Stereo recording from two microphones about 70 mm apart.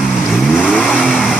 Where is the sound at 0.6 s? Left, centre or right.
Centre.